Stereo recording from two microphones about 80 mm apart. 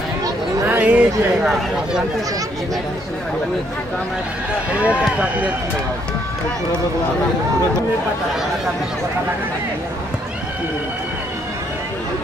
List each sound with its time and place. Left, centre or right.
0.7 s chatter: right
1.4 s speech: centre
4.6 s speech: centre